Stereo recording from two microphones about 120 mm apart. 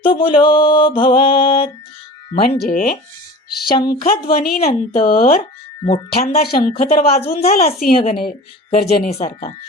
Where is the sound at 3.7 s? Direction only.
40° left (ahead or behind).